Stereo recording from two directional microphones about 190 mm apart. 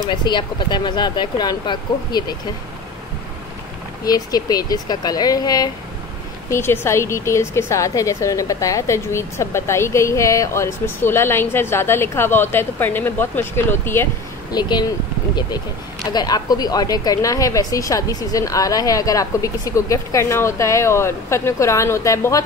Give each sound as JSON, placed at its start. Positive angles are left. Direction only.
{"t": 0.1, "sound": "speech", "side_deg": 25}
{"t": 4.0, "sound": "a woman's voice", "side_deg": 20}
{"t": 16.1, "sound": "a woman's voice", "side_deg": 20}